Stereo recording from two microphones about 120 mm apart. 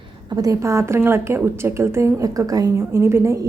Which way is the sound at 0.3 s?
30° right (ahead or behind).